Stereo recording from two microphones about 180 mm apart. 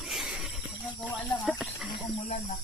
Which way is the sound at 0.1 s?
Centre (ahead or behind).